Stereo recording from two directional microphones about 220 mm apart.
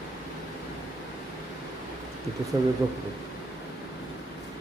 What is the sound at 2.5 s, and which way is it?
Speech, 20° right (ahead or behind).